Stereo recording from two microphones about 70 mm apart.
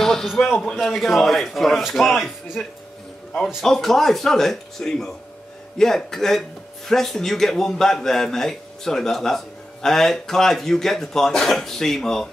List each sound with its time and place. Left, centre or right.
0.0 s a sound: centre
0.7 s a man's voice: centre
2.6 s a man's voice: centre